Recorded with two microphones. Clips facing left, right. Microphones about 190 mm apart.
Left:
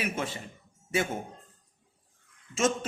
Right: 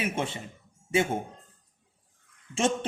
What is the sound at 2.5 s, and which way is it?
Speech, 30° right (ahead or behind).